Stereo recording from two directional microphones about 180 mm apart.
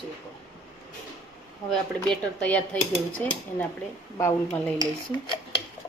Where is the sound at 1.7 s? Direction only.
5° left (ahead or behind).